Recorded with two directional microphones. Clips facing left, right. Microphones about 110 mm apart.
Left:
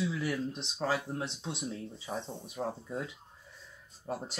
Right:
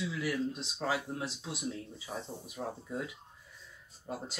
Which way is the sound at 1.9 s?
30° left (ahead or behind).